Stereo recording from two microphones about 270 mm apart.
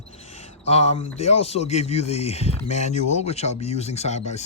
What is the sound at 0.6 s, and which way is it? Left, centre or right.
Speech, left.